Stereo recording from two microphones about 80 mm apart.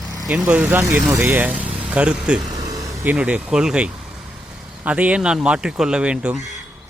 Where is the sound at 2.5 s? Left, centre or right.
Right.